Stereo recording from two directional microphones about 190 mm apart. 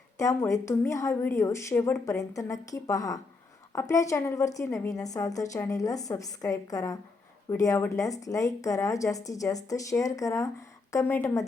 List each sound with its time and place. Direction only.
0.2 s a woman's voice: 15° left (ahead or behind)